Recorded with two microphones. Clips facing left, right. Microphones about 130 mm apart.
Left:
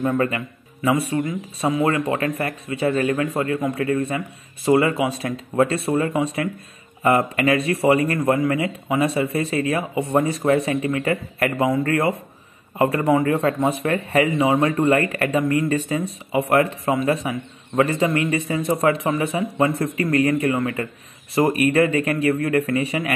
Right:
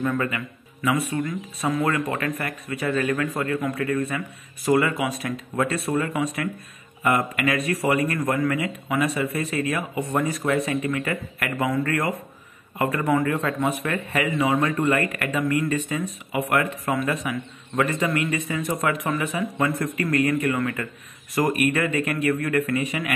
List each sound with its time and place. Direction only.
0.0 s speech: 35° left (ahead or behind)